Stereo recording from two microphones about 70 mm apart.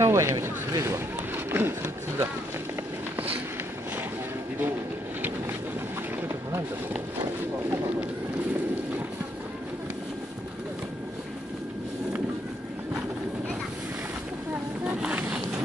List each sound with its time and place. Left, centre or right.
0.0 s speech: right
1.3 s speech: right
14.9 s a sound: centre